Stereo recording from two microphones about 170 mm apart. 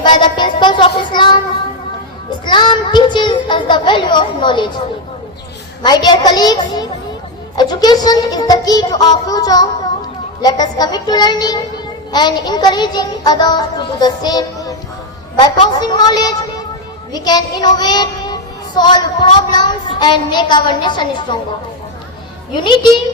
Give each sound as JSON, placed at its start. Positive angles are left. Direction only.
{"t": 0.0, "sound": "child singing", "side_deg": 25}
{"t": 2.5, "sound": "child singing", "side_deg": 25}
{"t": 5.8, "sound": "child singing", "side_deg": 25}
{"t": 22.5, "sound": "child singing", "side_deg": 30}